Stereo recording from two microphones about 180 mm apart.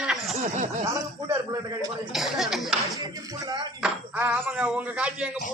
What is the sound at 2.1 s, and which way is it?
Speech, centre (ahead or behind).